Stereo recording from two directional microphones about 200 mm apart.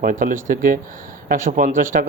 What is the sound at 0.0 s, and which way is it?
A man's voice, 40° right (ahead or behind).